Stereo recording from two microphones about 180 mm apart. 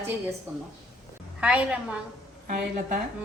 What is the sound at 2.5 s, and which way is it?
Speech, 45° right (ahead or behind).